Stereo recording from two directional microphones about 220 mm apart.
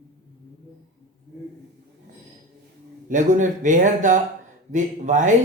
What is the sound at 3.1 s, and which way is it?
Speech, 35° right (ahead or behind).